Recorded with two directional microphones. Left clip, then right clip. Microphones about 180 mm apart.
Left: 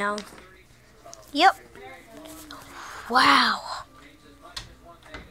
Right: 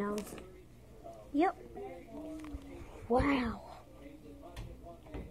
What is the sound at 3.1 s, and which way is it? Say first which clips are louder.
Speech: left 11 dB; 90° left.